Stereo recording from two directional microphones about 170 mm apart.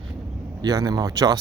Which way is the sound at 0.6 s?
20° right (ahead or behind).